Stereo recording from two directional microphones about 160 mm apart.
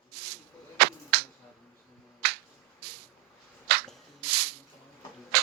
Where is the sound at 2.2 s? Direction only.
85° right.